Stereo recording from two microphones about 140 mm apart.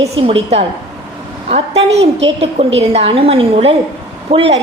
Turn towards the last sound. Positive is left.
turn(degrees=-45)  # may be behind; listen again after turning